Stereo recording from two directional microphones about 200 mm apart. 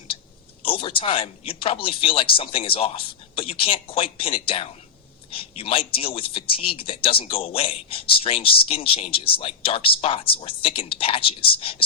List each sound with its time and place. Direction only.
0.6 s speech: 25° left (ahead or behind)